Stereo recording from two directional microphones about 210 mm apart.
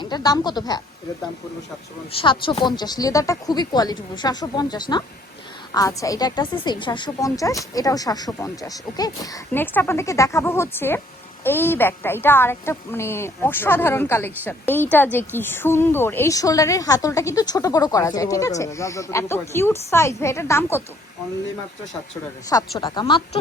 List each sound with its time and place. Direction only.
0.0 s speech: 20° left (ahead or behind)
2.1 s speech: 25° left (ahead or behind)
22.8 s speech: 20° left (ahead or behind)